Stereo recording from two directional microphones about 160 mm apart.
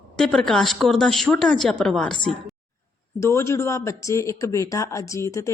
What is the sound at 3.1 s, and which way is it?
A woman's voice, 15° left (ahead or behind).